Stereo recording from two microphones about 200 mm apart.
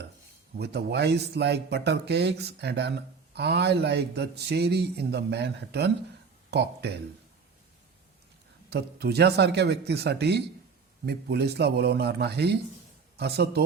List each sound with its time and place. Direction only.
0.5 s speech: 55° right (ahead or behind)
8.7 s speech: 55° right (ahead or behind)